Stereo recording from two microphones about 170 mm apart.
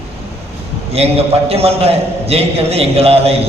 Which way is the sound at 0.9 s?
35° right (ahead or behind).